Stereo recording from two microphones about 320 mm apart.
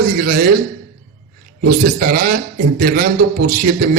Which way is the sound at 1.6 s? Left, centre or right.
Right.